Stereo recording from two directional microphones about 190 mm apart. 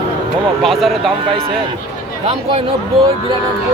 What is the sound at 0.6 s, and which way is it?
Speech, centre (ahead or behind).